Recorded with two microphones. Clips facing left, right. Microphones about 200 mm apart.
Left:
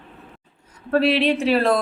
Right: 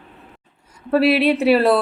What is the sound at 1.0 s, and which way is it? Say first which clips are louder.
Speech: right 3 dB; 5° right (ahead or behind).